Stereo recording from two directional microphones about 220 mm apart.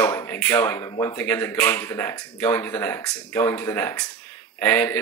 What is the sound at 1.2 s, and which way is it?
Speech, 10° left (ahead or behind).